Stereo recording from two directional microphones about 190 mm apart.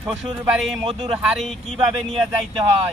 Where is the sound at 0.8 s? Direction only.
25° right (ahead or behind).